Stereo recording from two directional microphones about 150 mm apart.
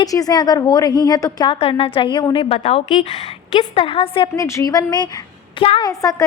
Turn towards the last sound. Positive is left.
turn(degrees=25)  # may be behind; listen again after turning